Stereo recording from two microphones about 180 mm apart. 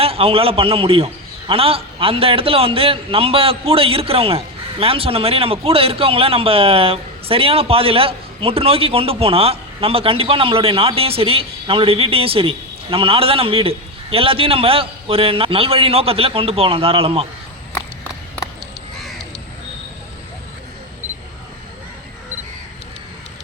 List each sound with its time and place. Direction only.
0.0 s a man's voice: 30° right (ahead or behind)